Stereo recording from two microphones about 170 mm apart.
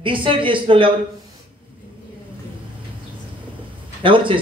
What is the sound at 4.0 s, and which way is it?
Speech, 30° right (ahead or behind).